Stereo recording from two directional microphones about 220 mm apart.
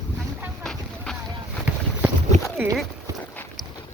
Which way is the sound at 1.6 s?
5° right (ahead or behind).